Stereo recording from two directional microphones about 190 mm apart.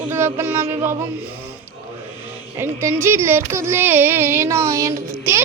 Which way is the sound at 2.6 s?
10° right (ahead or behind).